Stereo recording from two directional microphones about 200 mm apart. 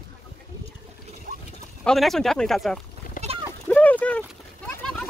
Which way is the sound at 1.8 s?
Centre (ahead or behind).